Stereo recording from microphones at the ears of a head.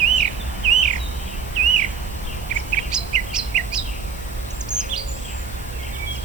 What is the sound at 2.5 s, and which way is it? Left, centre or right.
Bird vocalization, right.